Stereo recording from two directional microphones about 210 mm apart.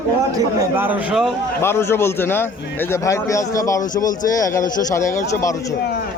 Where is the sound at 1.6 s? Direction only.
10° left (ahead or behind).